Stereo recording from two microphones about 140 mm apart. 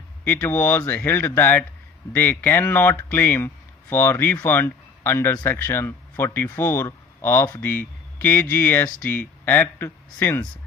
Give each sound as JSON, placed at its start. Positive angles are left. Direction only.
{"t": 0.3, "sound": "speech", "side_deg": 15}